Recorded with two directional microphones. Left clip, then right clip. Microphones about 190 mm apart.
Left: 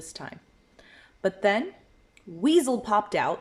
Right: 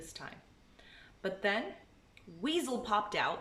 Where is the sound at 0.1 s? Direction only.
35° left (ahead or behind).